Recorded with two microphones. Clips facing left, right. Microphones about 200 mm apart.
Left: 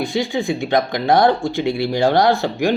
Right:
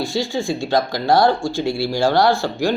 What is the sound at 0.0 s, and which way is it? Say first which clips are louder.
Speech: left 1 dB; 20° left (ahead or behind).